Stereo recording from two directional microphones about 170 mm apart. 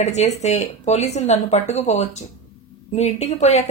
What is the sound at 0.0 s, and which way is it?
A woman's voice, 40° left (ahead or behind).